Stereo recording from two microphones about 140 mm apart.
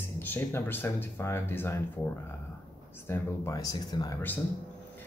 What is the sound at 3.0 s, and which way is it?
Speech, 25° left (ahead or behind).